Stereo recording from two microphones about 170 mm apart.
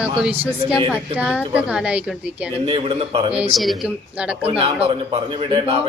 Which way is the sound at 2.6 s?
35° right (ahead or behind).